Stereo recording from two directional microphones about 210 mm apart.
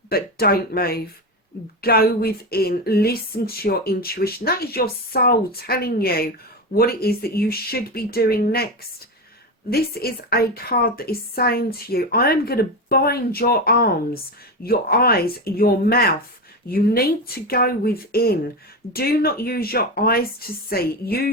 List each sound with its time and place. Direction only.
0.1 s speech: 45° left (ahead or behind)
9.6 s speech: 45° left (ahead or behind)